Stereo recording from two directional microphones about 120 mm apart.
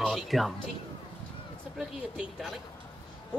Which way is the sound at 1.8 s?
Centre (ahead or behind).